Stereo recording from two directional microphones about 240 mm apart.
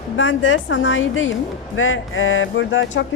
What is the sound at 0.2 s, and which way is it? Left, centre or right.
Speech, left.